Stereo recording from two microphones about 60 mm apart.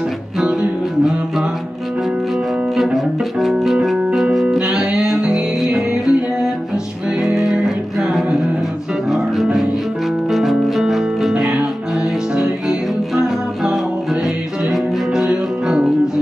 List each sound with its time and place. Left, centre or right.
2.7 s music: centre
14.2 s music: centre